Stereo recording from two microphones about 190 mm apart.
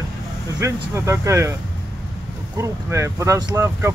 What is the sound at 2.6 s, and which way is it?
Speech, 15° right (ahead or behind).